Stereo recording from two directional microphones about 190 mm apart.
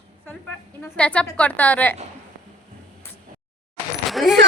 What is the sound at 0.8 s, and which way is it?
A woman's voice, 5° left (ahead or behind).